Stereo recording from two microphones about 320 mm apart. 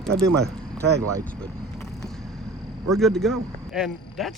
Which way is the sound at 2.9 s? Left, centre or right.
Centre.